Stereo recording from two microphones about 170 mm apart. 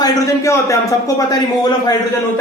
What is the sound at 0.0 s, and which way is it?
A man's voice, 20° left (ahead or behind).